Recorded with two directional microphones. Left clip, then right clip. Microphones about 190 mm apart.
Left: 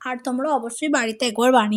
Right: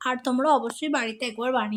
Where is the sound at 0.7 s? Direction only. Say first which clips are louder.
Left 4 dB; 15° left (ahead or behind).